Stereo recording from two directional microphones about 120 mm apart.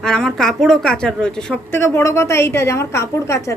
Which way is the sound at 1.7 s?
20° left (ahead or behind).